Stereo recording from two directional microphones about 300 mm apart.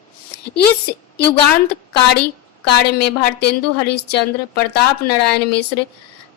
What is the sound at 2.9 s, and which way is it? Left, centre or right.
Speech, left.